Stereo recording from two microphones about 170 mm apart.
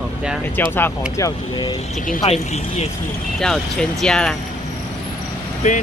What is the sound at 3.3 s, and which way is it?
Speech, 5° left (ahead or behind).